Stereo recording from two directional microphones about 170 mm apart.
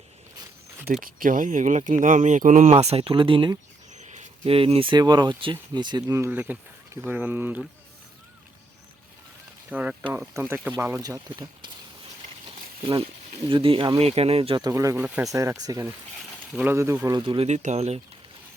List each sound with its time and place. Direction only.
1.0 s speech: 50° right (ahead or behind); by 3.6 s 30° right (ahead or behind)
3.9 s speech: 45° right (ahead or behind); by 7.6 s 10° right (ahead or behind)
9.6 s speech: 10° right (ahead or behind)
15.3 s speech: 20° right (ahead or behind)
17.3 s speech: 40° right (ahead or behind)